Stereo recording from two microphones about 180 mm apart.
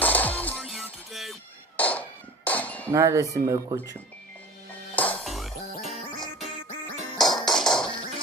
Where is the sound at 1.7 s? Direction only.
10° left (ahead or behind).